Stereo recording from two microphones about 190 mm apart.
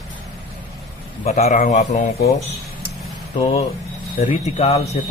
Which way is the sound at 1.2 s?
35° left (ahead or behind).